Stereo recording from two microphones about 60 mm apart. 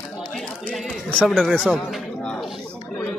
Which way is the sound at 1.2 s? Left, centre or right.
Centre.